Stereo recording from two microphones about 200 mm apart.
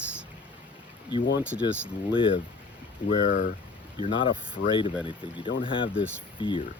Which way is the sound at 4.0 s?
25° left (ahead or behind).